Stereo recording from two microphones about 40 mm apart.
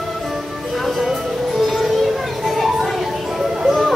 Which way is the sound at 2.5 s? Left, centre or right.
Centre.